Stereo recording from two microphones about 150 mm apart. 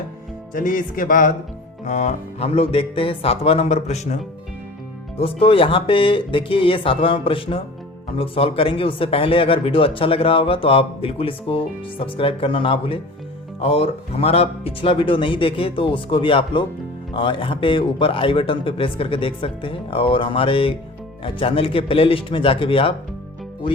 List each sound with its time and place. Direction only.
0.5 s music: 65° left (ahead or behind)
1.8 s speech: 50° left (ahead or behind)
5.1 s speech: 40° left (ahead or behind)